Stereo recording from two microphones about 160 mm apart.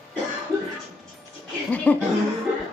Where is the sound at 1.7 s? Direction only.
10° left (ahead or behind).